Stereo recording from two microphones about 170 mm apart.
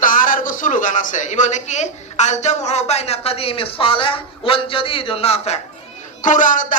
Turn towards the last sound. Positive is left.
turn(degrees=50)  # may be behind; listen again after turning